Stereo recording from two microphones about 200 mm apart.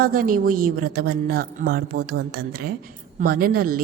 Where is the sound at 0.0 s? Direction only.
45° right (ahead or behind).